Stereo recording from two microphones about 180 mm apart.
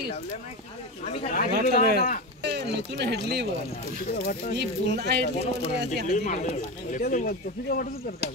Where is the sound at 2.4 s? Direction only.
70° right (ahead or behind).